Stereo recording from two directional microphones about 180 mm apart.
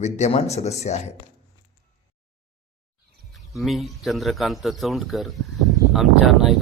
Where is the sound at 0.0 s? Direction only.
35° left (ahead or behind).